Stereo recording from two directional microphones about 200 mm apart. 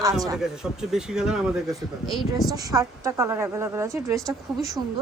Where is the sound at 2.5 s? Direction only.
15° right (ahead or behind).